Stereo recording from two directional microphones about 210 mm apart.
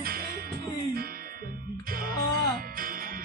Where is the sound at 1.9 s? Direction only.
45° right (ahead or behind).